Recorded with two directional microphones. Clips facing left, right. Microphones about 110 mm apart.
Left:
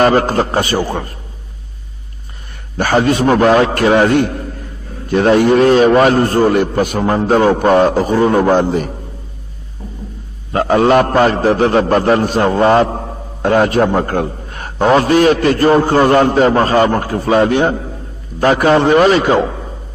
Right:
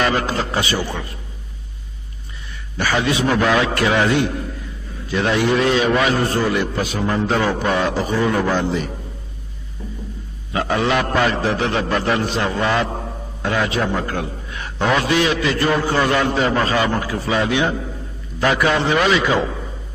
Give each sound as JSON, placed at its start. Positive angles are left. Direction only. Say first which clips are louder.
{"t": 0.0, "sound": "a man's voice", "louder": "left 8 dB", "side_deg": 45}
{"t": 2.8, "sound": "a man's voice", "louder": "left 7 dB", "side_deg": 50}
{"t": 10.5, "sound": "a man's voice", "louder": "left 8 dB", "side_deg": 45}